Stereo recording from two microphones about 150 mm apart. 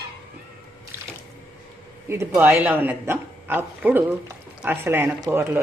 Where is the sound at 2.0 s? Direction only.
20° right (ahead or behind).